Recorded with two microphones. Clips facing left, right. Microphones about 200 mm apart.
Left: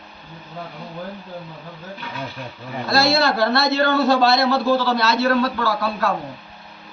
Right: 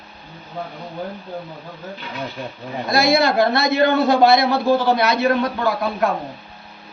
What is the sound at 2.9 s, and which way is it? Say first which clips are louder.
A man's voice: right 2 dB; 15° right (ahead or behind).